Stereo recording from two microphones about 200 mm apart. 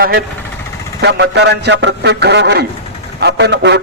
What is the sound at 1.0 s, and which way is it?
A man's voice, 60° right (ahead or behind).